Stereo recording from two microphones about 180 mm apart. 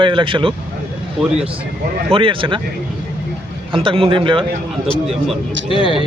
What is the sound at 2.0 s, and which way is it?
Speech, 30° right (ahead or behind).